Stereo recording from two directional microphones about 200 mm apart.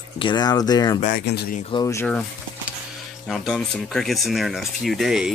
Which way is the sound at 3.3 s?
Centre (ahead or behind).